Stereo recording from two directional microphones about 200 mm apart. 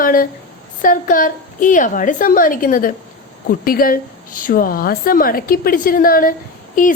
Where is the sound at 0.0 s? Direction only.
45° left (ahead or behind).